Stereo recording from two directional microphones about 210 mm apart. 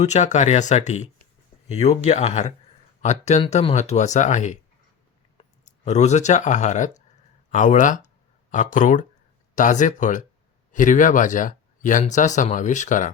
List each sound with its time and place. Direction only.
0.0 s speech: 35° left (ahead or behind)